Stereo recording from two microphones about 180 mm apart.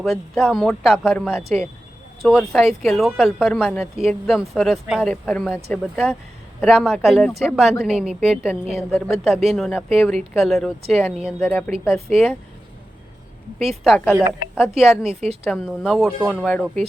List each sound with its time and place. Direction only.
0.4 s speech: centre (ahead or behind)
11.3 s speech: 10° left (ahead or behind)
11.7 s speech: 35° right (ahead or behind)
12.1 s speech: 5° left (ahead or behind)
13.8 s speech: centre (ahead or behind)
14.2 s a woman's voice: 10° right (ahead or behind)
14.6 s speech: centre (ahead or behind)